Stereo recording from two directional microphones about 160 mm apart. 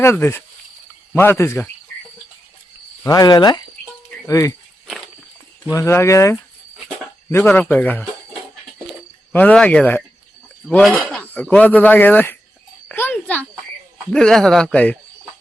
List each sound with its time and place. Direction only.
0.0 s speech: 15° left (ahead or behind)
3.0 s cricket: 20° left (ahead or behind)
5.7 s speech: 15° left (ahead or behind)
6.8 s a sound: 15° left (ahead or behind)
7.4 s speech: 10° left (ahead or behind)
12.9 s a sound: 10° left (ahead or behind)
14.1 s speech: 5° left (ahead or behind)